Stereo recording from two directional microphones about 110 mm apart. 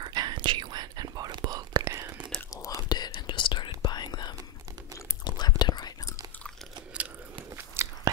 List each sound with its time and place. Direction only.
0.0 s whispering: 40° right (ahead or behind)
1.9 s whispering: 25° right (ahead or behind)
2.5 s whispering: 30° left (ahead or behind)
7.5 s biting: 20° right (ahead or behind)